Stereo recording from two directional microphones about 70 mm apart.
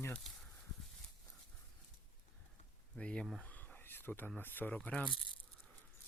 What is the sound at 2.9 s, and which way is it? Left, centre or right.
Speech, centre.